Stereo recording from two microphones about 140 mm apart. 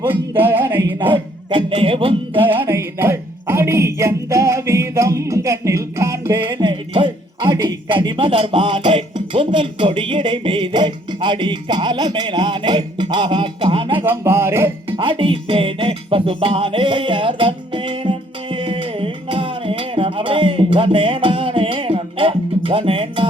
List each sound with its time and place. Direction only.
0.0 s a man's voice: 15° right (ahead or behind)
1.1 s music: 40° right (ahead or behind)
2.6 s speech: 20° right (ahead or behind)
6.4 s speech: 35° right (ahead or behind)
14.0 s a man's voice: 15° right (ahead or behind)
14.8 s music: 35° right (ahead or behind)